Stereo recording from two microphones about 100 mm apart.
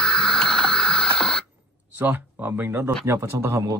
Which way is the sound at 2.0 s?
15° right (ahead or behind).